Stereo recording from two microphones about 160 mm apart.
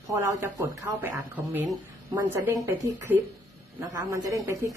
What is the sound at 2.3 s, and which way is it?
A woman's voice, 15° right (ahead or behind).